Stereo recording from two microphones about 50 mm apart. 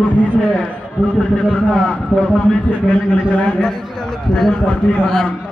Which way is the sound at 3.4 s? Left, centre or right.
Centre.